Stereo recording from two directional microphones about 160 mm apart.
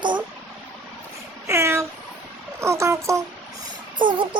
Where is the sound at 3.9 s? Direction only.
30° right (ahead or behind).